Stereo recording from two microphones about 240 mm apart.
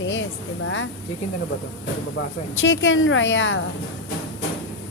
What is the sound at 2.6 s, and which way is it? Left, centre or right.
A woman's voice, left.